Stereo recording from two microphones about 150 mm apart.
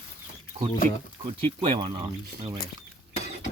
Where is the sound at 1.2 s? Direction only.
35° right (ahead or behind).